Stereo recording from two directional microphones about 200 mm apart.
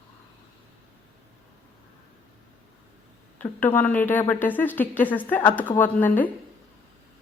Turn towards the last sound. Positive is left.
turn(degrees=10)  # may be behind; listen again after turning